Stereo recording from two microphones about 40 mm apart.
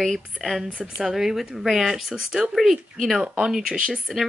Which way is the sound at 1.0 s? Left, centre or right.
Centre.